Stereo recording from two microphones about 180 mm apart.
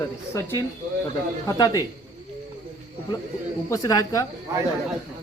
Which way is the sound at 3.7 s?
20° left (ahead or behind).